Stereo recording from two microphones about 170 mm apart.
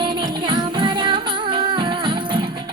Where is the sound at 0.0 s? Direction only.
25° right (ahead or behind).